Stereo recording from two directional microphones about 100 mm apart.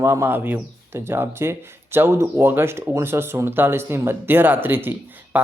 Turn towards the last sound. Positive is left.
turn(degrees=-20)  # may be behind; listen again after turning